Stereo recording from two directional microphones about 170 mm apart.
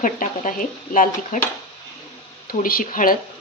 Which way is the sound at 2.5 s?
55° left (ahead or behind).